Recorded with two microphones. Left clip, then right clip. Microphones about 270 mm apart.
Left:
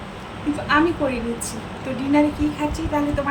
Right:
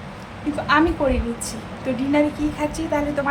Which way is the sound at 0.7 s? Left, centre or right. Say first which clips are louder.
Even; centre.